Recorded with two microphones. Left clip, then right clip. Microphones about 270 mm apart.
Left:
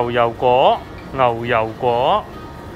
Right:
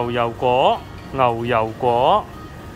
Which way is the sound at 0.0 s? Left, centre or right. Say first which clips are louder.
Left 4 dB; centre.